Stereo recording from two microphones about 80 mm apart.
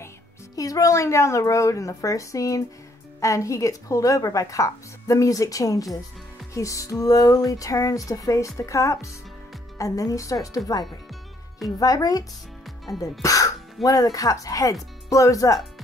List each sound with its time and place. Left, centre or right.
0.6 s speech: left
11.8 s speech: left
12.6 s music: centre
13.2 s speech: left